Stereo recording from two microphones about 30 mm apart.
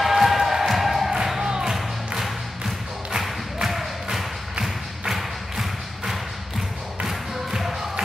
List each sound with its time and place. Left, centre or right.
0.0 s music: centre
1.4 s music: right
1.8 s music: centre
3.6 s a sound: centre
4.6 s thump: centre
7.1 s a sound: centre